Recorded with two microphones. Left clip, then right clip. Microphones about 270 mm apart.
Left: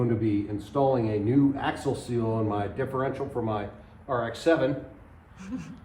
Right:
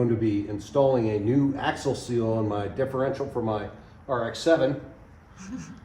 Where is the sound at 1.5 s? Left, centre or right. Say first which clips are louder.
Right 2 dB; centre.